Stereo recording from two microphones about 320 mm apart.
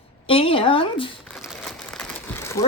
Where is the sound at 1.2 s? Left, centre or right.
Centre.